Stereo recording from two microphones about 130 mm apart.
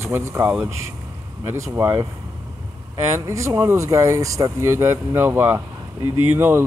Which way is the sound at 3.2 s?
20° right (ahead or behind).